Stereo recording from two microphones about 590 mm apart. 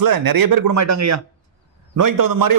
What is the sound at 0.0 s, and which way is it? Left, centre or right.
A man's voice, right.